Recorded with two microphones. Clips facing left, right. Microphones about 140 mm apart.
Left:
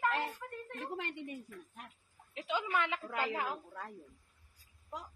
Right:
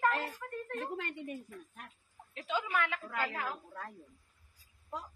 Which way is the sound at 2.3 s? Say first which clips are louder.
Even; 20° left (ahead or behind).